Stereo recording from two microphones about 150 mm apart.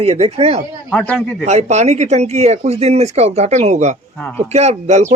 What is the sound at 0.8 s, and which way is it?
Speech, 5° left (ahead or behind).